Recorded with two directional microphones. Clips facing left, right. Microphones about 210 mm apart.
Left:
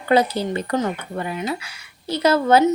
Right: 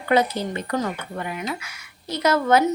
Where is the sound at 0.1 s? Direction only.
30° left (ahead or behind).